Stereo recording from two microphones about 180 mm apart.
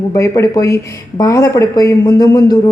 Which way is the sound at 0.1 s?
15° left (ahead or behind).